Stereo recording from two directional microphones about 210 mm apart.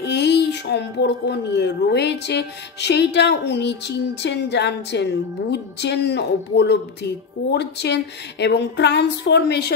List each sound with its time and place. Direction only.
0.0 s speech: 55° left (ahead or behind)